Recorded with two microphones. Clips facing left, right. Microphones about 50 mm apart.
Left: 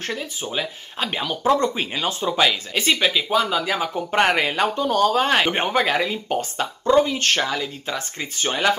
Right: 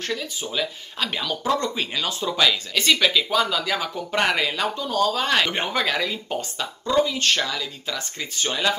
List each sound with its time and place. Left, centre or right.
0.1 s speech: left